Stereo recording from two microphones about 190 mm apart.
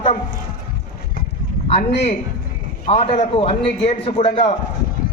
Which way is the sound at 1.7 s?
35° left (ahead or behind).